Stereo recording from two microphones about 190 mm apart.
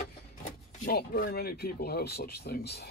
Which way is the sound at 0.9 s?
50° left (ahead or behind).